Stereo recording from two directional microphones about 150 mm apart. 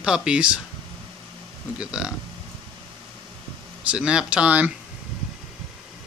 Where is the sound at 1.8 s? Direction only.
5° right (ahead or behind).